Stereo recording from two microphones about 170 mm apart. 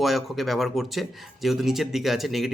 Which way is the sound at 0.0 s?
Centre (ahead or behind).